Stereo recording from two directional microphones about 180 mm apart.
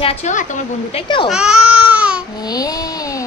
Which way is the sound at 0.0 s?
35° left (ahead or behind).